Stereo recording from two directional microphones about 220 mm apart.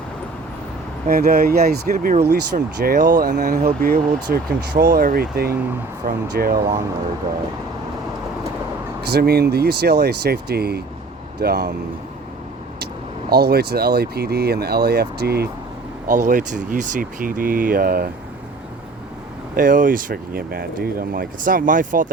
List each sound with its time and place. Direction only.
1.0 s speech: 45° right (ahead or behind)
9.0 s speech: 45° right (ahead or behind)
13.3 s speech: 45° right (ahead or behind)
16.0 s speech: 35° right (ahead or behind)
19.5 s speech: 40° right (ahead or behind)